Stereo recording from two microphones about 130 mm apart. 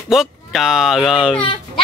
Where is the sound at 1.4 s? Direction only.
45° left (ahead or behind).